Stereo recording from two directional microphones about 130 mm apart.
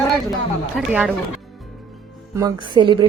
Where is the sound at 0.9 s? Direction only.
10° right (ahead or behind).